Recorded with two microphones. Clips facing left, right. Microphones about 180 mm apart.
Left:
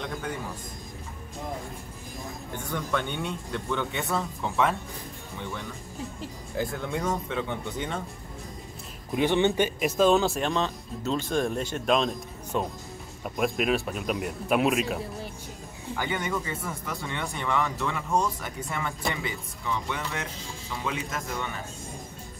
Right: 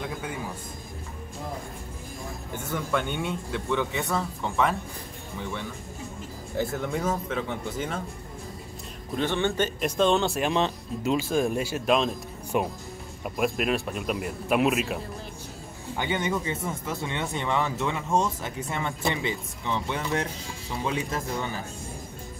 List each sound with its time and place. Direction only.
0.0 s a man's voice: 5° right (ahead or behind)
2.5 s a man's voice: 5° right (ahead or behind)
9.1 s speech: 15° left (ahead or behind)
9.8 s a man's voice: 5° left (ahead or behind)
10.5 s speech: 15° right (ahead or behind)
11.1 s a man's voice: 5° right (ahead or behind)
12.5 s speech: 15° right (ahead or behind)
13.2 s a man's voice: centre (ahead or behind)
16.0 s speech: 20° right (ahead or behind)